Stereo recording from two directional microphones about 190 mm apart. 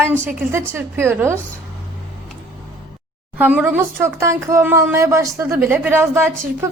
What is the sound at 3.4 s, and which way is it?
A woman's voice, 10° right (ahead or behind).